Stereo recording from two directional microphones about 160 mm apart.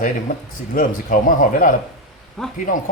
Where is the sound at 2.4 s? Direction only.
Centre (ahead or behind).